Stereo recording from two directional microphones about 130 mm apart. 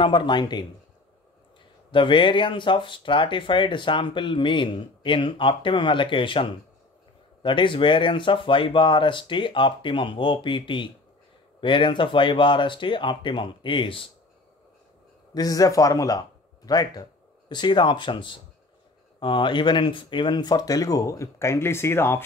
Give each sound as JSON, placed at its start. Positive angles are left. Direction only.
{"t": 0.0, "sound": "speech", "side_deg": 35}
{"t": 1.9, "sound": "speech", "side_deg": 40}
{"t": 15.3, "sound": "speech", "side_deg": 30}